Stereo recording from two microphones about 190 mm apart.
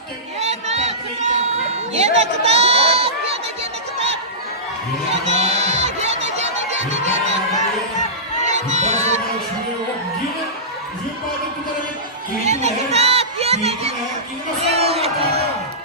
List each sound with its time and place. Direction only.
0.3 s a sound: 35° right (ahead or behind)
5.3 s music: 35° right (ahead or behind)
6.9 s crowd: 35° right (ahead or behind)
8.4 s music: 35° right (ahead or behind)
12.5 s a sound: 35° right (ahead or behind)
14.6 s crowd: 35° right (ahead or behind)